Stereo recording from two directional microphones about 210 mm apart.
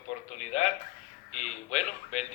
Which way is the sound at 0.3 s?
30° left (ahead or behind).